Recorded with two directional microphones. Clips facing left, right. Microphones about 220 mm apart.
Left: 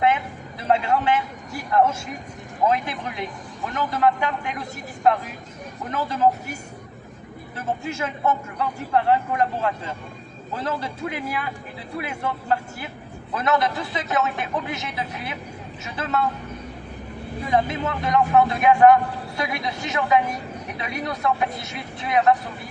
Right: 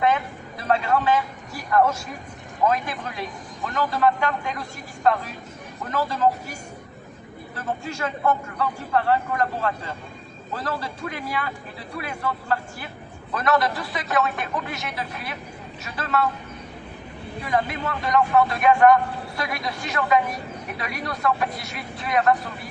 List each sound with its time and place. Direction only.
0.7 s a man's voice: 20° left (ahead or behind)
5.9 s a man's voice: 20° left (ahead or behind)
7.5 s a man's voice: 20° left (ahead or behind)
17.5 s a man's voice: 20° left (ahead or behind)